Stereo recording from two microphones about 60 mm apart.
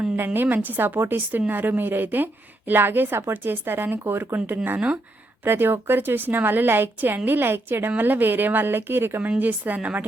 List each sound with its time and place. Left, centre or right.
0.3 s a woman's voice: right
9.4 s a woman's voice: right